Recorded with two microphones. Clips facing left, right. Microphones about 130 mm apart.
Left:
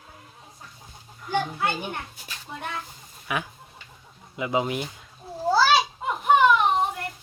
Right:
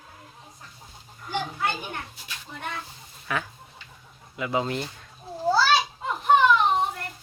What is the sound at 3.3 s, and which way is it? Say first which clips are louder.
Speech: even; 15° left (ahead or behind).